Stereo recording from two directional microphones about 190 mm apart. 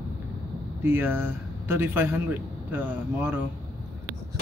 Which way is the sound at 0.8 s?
10° right (ahead or behind).